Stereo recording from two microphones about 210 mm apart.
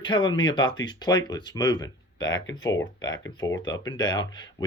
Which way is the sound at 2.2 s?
60° left (ahead or behind).